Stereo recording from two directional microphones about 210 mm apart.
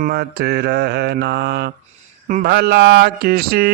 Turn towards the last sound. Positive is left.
turn(degrees=-45)  # may be behind; listen again after turning